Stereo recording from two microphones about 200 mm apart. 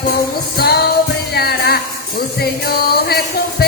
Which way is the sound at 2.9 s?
50° left (ahead or behind).